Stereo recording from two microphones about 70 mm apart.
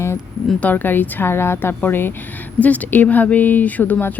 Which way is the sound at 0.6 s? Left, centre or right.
Left.